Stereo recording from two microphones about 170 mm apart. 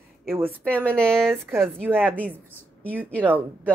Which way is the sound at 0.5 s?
10° left (ahead or behind).